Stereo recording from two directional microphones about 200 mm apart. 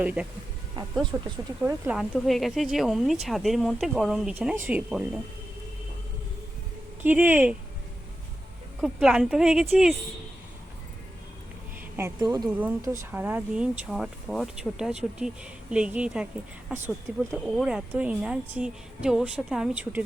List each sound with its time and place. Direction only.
0.0 s speech: 5° right (ahead or behind)
7.0 s speech: 10° right (ahead or behind)
8.8 s speech: 5° right (ahead or behind)
11.9 s speech: 15° right (ahead or behind)